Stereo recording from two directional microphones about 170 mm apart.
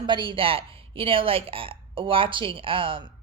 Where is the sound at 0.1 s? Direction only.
30° right (ahead or behind).